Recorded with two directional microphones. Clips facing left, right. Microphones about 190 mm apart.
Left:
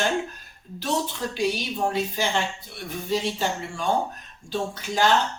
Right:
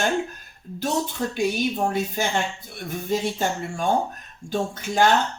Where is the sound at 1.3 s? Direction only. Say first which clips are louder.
Right 3 dB; 50° right (ahead or behind).